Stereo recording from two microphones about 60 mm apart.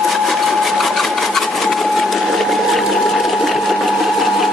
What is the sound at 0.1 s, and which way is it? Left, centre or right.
Sewing machine, centre.